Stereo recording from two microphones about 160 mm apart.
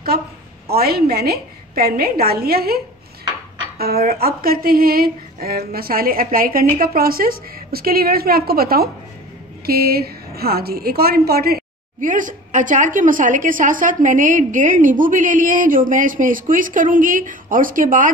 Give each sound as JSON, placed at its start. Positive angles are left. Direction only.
{"t": 0.7, "sound": "a woman's voice", "side_deg": -75}